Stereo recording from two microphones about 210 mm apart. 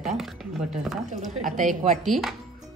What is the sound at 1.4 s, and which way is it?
Speech, 40° right (ahead or behind).